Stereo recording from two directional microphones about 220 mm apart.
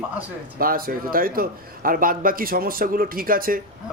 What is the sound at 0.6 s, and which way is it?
Speech, 40° right (ahead or behind).